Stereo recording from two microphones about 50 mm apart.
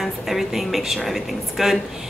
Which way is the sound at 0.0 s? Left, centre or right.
Centre.